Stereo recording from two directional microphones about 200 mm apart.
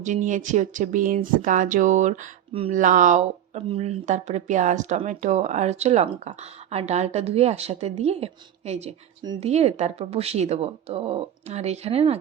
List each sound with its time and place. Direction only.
0.0 s speech: 40° right (ahead or behind)
9.2 s speech: 20° right (ahead or behind)
9.5 s speech: 35° right (ahead or behind)